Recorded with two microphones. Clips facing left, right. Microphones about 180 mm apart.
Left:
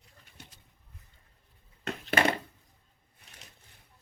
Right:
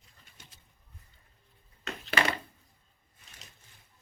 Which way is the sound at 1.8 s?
50° left (ahead or behind).